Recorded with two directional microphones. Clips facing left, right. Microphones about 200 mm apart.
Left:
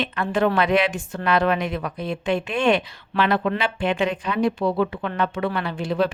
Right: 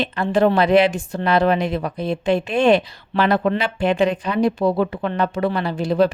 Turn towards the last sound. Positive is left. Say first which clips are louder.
# right 5 dB
turn(degrees=-40)  # may be behind; listen again after turning